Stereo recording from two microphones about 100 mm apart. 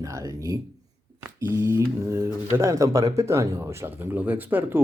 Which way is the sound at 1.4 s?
25° right (ahead or behind).